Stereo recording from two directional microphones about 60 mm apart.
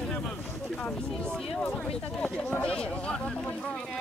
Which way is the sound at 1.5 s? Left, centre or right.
Centre.